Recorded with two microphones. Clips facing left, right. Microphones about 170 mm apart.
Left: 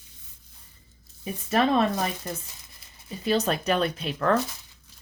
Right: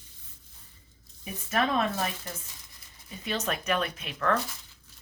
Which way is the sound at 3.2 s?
35° left (ahead or behind).